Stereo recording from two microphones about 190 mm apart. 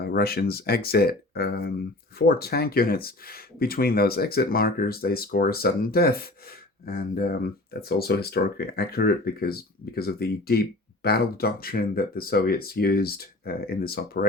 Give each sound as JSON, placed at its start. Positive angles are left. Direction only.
{"t": 0.0, "sound": "speech", "side_deg": 55}